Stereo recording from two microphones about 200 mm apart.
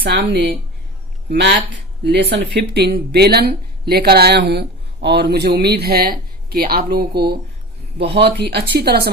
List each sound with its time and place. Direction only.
0.0 s a woman's voice: 55° right (ahead or behind)